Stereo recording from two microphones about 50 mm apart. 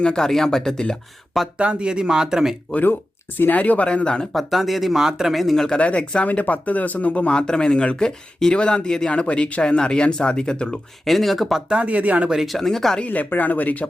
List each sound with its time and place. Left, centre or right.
0.0 s speech: centre
1.5 s speech: right
3.5 s speech: left
4.4 s speech: centre
5.7 s speech: left
7.3 s speech: centre
11.0 s speech: centre
11.7 s speech: right
12.3 s speech: centre
12.5 s speech: centre
13.1 s speech: left